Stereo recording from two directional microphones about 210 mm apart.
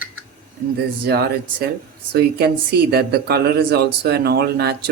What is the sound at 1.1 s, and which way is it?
Speech, 50° right (ahead or behind).